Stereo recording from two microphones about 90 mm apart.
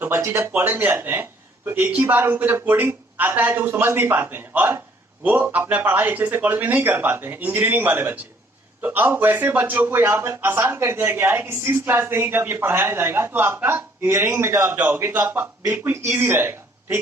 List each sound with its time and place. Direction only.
0.0 s a man's voice: 25° right (ahead or behind)